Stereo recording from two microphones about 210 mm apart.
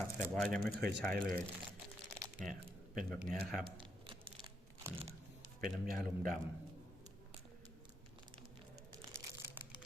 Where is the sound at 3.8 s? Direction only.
25° right (ahead or behind).